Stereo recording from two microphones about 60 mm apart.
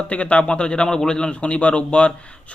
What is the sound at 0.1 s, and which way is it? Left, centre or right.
A man's voice, left.